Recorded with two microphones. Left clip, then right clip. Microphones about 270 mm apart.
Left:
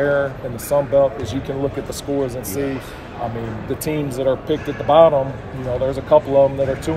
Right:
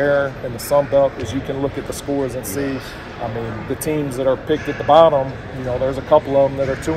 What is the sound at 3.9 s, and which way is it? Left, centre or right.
Speech, centre.